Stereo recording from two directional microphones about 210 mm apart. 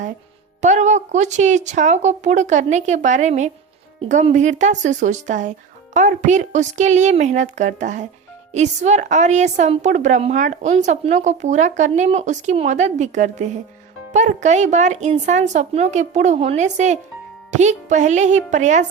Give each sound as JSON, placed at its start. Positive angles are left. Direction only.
{"t": 0.6, "sound": "a woman's voice", "side_deg": -35}